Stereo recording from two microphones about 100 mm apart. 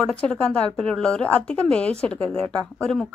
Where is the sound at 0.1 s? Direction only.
10° left (ahead or behind).